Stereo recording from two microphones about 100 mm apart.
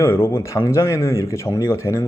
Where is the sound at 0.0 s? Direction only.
25° left (ahead or behind).